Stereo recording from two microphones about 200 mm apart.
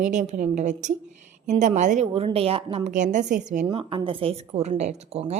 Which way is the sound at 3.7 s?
25° right (ahead or behind).